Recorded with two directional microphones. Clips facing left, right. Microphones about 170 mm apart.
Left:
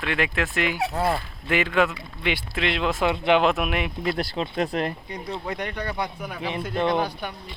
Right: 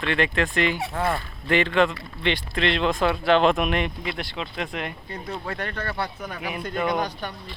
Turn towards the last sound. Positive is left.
turn(degrees=10)  # may be behind; listen again after turning